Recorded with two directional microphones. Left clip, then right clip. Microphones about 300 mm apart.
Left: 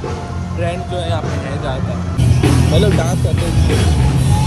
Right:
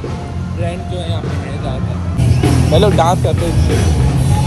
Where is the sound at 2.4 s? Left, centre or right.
Centre.